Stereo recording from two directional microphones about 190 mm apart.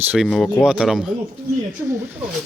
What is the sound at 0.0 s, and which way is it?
Speech, 5° right (ahead or behind).